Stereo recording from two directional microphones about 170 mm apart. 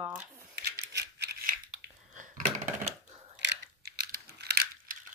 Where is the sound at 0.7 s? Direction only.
70° right (ahead or behind).